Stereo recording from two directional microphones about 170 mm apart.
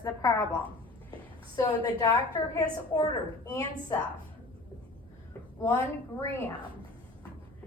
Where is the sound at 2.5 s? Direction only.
20° left (ahead or behind).